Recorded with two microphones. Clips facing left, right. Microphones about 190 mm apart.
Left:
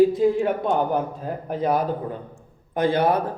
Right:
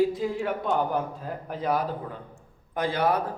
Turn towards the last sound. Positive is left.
turn(degrees=25)  # may be behind; listen again after turning